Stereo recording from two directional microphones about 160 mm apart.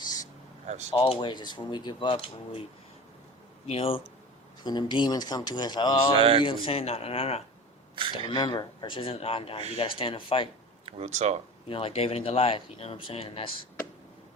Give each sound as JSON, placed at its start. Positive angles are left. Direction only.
{"t": 0.0, "sound": "a sound", "side_deg": 25}
{"t": 0.9, "sound": "speech", "side_deg": 35}
{"t": 3.7, "sound": "speech", "side_deg": 35}
{"t": 6.1, "sound": "speech", "side_deg": -35}
{"t": 6.4, "sound": "speech", "side_deg": 35}
{"t": 10.8, "sound": "speech", "side_deg": -40}
{"t": 11.7, "sound": "speech", "side_deg": 35}